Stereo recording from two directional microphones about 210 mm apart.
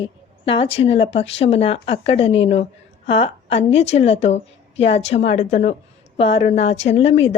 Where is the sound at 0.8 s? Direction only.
25° left (ahead or behind).